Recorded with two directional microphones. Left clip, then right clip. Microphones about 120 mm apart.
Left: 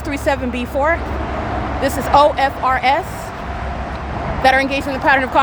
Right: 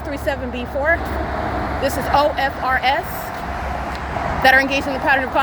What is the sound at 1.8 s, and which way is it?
Speech, 40° left (ahead or behind).